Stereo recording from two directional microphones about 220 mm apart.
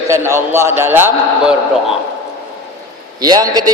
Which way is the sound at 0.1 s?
10° right (ahead or behind).